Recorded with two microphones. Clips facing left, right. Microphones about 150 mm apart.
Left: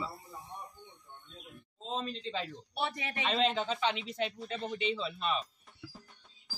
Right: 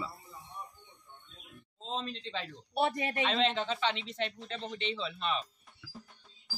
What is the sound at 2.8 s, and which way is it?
Speech, 45° right (ahead or behind).